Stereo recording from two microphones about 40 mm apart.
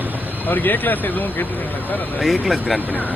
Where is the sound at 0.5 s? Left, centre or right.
Left.